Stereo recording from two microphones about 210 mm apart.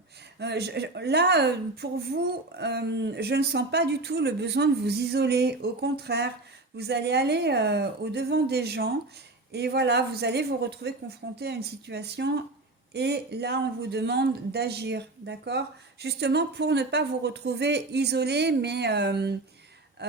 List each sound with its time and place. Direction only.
0.3 s speech: 55° right (ahead or behind)